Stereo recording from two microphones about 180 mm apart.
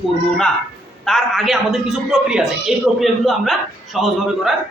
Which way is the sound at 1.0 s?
Centre (ahead or behind).